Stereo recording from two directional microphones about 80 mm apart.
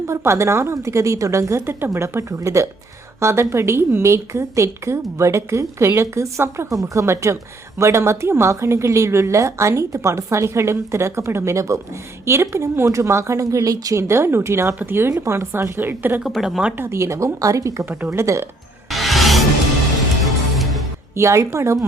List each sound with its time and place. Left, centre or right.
0.1 s a woman's voice: right
14.1 s a woman's voice: right
16.2 s speech: centre
16.7 s a woman's voice: right
17.8 s a woman's voice: right
18.9 s music: centre
21.2 s a woman's voice: right